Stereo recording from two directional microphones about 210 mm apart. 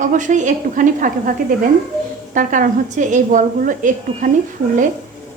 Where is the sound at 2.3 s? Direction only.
40° right (ahead or behind).